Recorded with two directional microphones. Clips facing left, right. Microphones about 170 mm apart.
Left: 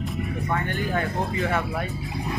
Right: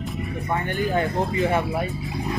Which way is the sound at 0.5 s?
20° right (ahead or behind).